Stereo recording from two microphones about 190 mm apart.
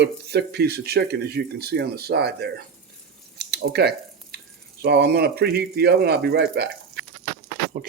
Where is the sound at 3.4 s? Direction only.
60° right (ahead or behind).